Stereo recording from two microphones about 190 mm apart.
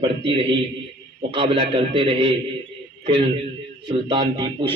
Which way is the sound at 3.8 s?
25° right (ahead or behind).